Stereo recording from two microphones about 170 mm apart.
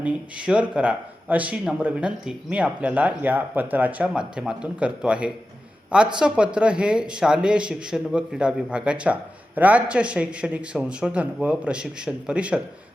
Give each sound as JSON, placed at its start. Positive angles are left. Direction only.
{"t": 0.0, "sound": "speech", "side_deg": -5}